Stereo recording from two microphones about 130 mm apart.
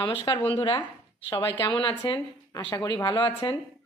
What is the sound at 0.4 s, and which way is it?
A woman's voice, 40° left (ahead or behind).